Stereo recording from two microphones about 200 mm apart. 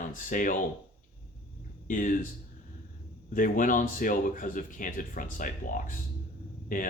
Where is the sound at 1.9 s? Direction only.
40° left (ahead or behind).